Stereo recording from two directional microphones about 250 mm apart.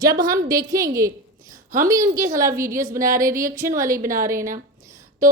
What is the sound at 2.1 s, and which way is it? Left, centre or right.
Speech, centre.